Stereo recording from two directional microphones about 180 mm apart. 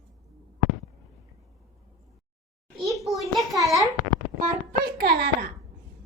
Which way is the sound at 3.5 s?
20° right (ahead or behind).